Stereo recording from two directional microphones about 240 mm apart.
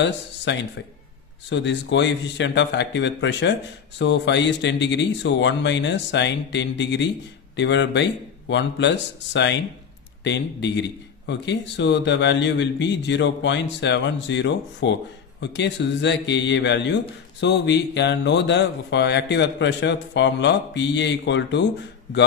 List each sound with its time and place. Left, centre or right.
0.0 s a man's voice: left